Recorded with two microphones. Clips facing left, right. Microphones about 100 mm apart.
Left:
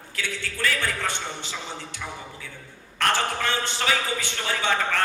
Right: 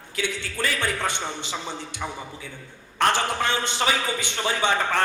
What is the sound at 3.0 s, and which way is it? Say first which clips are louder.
A man's voice: right 2 dB; 20° right (ahead or behind).